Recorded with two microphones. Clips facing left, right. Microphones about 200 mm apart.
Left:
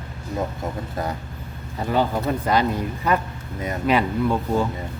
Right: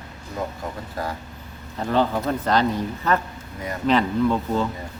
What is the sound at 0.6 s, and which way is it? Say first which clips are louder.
Speech: left 2 dB; 20° left (ahead or behind).